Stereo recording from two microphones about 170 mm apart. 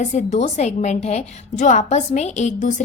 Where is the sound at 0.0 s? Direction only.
45° left (ahead or behind).